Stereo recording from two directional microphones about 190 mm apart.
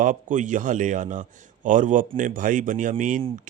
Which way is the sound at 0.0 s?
40° right (ahead or behind).